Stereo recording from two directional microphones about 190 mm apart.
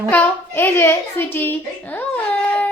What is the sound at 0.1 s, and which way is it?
A child's voice, 10° left (ahead or behind).